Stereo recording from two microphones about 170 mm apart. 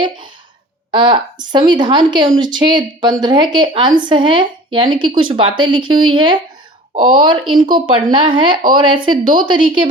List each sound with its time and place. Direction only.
0.9 s a woman's voice: 30° right (ahead or behind)